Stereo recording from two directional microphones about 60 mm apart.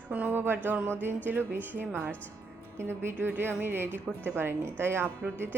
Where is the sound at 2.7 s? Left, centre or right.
Right.